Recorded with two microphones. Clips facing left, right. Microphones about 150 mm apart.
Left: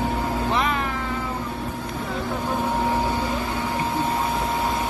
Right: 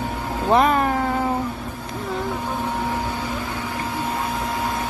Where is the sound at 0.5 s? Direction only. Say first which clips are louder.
Right 11 dB; 45° right (ahead or behind).